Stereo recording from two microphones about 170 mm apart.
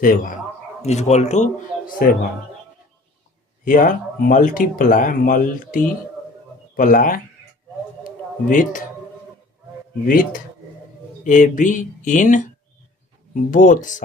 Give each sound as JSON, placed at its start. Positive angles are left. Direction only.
{"t": 0.0, "sound": "speech", "side_deg": 55}
{"t": 0.8, "sound": "speech", "side_deg": 40}
{"t": 2.0, "sound": "speech", "side_deg": 55}
{"t": 3.6, "sound": "speech", "side_deg": 55}
{"t": 8.0, "sound": "a sound", "side_deg": 50}
{"t": 11.2, "sound": "speech", "side_deg": 50}